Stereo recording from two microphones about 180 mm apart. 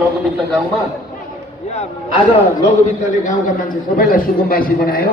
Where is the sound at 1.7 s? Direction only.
35° left (ahead or behind).